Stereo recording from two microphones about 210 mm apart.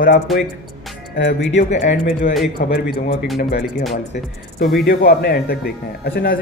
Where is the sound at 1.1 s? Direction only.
60° left (ahead or behind).